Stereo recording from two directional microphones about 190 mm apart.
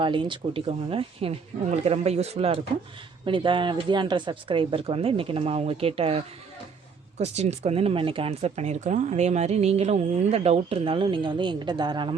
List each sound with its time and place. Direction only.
0.0 s speech: 25° right (ahead or behind)